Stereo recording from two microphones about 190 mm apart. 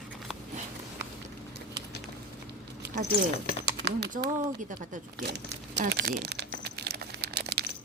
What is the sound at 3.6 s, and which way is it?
Typing, 60° right (ahead or behind).